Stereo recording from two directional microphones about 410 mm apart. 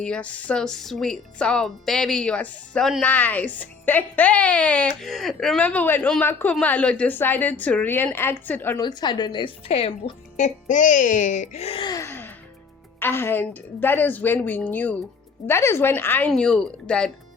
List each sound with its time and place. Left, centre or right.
0.0 s speech: centre